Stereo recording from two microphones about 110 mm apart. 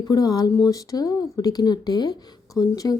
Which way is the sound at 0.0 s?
35° left (ahead or behind).